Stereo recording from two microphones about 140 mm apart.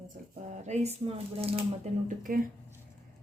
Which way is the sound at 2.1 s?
90° right.